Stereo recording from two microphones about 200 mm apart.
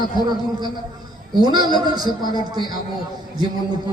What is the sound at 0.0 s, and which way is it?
A man's voice, 20° right (ahead or behind).